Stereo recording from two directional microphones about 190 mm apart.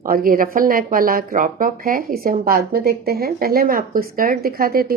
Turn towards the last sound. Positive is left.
turn(degrees=-50)  # may be behind; listen again after turning